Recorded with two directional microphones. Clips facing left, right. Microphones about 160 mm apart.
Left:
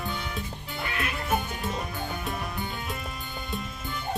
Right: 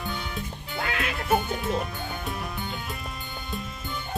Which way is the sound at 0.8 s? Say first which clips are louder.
Right 3 dB; 90° right.